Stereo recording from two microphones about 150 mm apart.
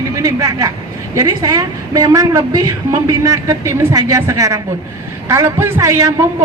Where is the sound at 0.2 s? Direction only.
25° right (ahead or behind).